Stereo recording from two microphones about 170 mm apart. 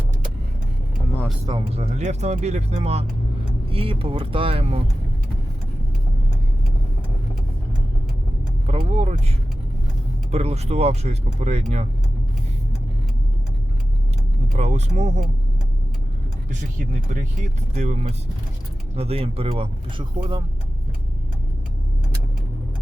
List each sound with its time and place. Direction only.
1.5 s speech: 35° right (ahead or behind)
8.6 s speech: 35° right (ahead or behind)
10.3 s speech: 40° right (ahead or behind)
14.5 s speech: 40° right (ahead or behind)
16.5 s speech: 45° right (ahead or behind); by 20.4 s 25° right (ahead or behind)